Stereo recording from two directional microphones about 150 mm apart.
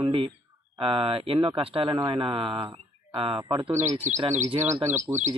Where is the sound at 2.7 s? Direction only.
35° right (ahead or behind).